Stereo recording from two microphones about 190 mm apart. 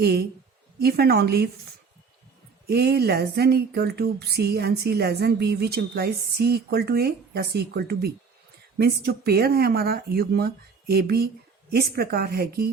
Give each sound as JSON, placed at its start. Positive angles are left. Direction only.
{"t": 0.0, "sound": "speech", "side_deg": -60}
{"t": 2.6, "sound": "speech", "side_deg": -55}